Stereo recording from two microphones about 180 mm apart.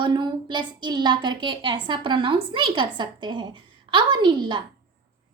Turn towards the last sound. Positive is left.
turn(degrees=-25)  # may be behind; listen again after turning